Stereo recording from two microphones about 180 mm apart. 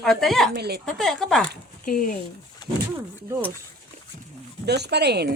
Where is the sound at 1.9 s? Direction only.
50° left (ahead or behind).